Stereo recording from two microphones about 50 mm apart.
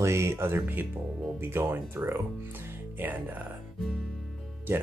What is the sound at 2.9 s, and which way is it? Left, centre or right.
Speech, right.